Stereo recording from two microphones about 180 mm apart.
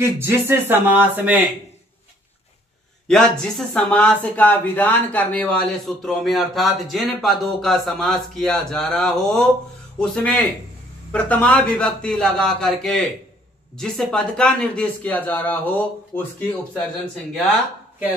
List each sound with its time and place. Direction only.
0.0 s speech: 15° right (ahead or behind)
3.1 s speech: 5° left (ahead or behind)